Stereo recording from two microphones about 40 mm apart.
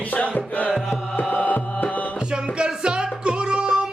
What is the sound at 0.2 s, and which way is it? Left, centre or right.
Music, left.